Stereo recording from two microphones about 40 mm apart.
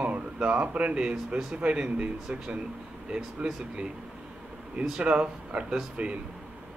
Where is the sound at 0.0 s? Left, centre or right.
Right.